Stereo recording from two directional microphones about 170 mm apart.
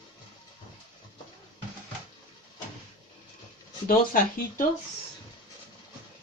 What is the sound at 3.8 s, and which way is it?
Speech, 55° left (ahead or behind).